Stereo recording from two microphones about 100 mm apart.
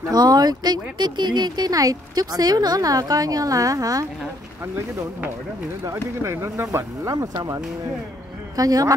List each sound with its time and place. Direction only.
0.1 s speech: 40° right (ahead or behind)
5.9 s speech: 25° right (ahead or behind)
8.5 s speech: 35° right (ahead or behind)